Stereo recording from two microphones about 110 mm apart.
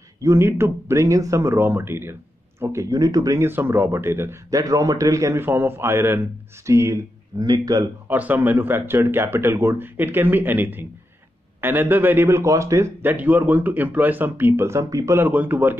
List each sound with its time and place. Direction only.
0.2 s speech: 25° right (ahead or behind)
8.1 s speech: 15° right (ahead or behind)
15.2 s a man's voice: 15° right (ahead or behind)